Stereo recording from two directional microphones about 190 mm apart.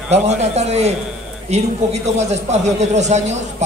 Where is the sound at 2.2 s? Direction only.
35° right (ahead or behind).